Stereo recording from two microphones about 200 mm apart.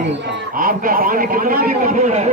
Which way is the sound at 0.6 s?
45° right (ahead or behind).